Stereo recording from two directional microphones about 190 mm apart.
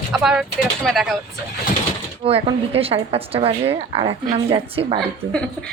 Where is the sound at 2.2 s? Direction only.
30° right (ahead or behind).